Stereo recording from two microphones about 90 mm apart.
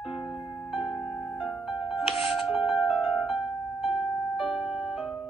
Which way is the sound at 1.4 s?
5° right (ahead or behind).